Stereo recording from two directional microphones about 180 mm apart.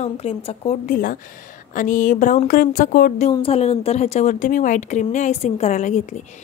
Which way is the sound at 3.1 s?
35° left (ahead or behind).